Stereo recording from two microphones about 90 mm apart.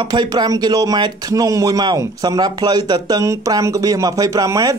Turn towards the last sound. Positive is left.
turn(degrees=-40)  # may be behind; listen again after turning